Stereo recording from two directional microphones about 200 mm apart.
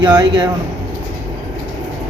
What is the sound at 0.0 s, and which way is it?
Speech, 20° right (ahead or behind).